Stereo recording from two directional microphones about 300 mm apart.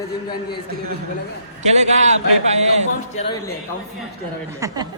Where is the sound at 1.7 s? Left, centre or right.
Right.